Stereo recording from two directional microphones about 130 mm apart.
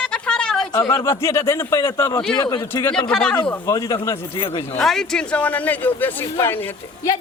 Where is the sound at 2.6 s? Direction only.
20° left (ahead or behind).